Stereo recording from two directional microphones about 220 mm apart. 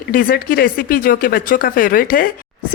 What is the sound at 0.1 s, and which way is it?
Speech, 40° left (ahead or behind).